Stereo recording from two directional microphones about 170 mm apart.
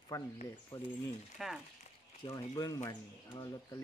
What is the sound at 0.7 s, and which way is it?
Speech, 35° left (ahead or behind).